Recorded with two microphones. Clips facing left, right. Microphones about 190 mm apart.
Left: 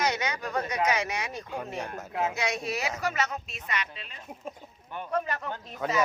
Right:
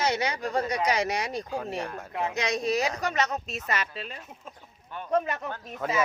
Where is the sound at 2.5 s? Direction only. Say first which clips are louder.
Right 5 dB; 35° right (ahead or behind).